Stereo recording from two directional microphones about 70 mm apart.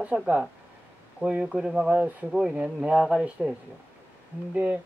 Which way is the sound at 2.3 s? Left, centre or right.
Centre.